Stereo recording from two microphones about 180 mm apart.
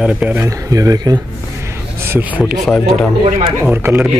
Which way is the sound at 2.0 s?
10° right (ahead or behind).